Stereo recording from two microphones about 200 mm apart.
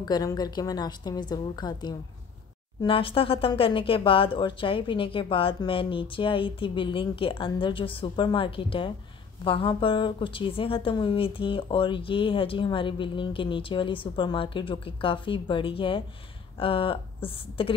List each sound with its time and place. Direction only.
0.0 s a woman's voice: 20° left (ahead or behind)